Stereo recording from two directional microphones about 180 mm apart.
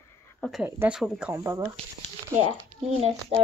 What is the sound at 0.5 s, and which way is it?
Speech, 5° right (ahead or behind).